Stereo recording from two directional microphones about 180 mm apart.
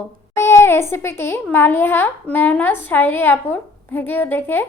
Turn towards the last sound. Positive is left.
turn(degrees=10)  # may be behind; listen again after turning